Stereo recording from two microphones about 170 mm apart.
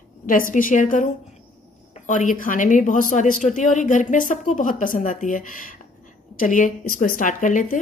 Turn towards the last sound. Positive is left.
turn(degrees=50)  # may be behind; listen again after turning